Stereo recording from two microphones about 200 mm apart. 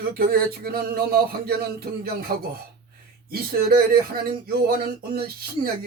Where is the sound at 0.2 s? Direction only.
50° right (ahead or behind).